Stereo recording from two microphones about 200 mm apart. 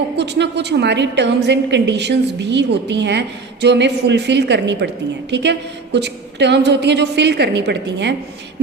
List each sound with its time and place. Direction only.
0.2 s a woman's voice: 60° right (ahead or behind)